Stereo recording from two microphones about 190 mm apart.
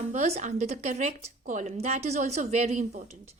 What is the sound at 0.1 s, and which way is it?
Speech, 35° right (ahead or behind).